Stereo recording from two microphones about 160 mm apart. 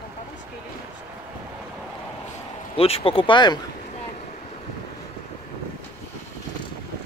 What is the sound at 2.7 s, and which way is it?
Speech, 35° left (ahead or behind).